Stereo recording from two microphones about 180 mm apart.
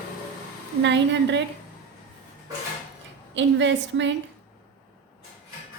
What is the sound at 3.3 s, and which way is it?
Speech, 90° right.